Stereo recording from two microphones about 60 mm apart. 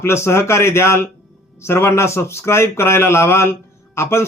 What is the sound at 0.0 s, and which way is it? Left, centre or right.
Speech, left.